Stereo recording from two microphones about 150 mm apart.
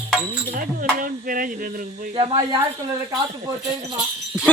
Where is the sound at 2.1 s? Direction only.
30° right (ahead or behind).